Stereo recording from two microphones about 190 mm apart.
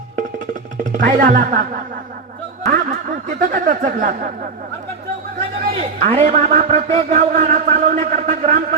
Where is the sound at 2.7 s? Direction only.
45° right (ahead or behind).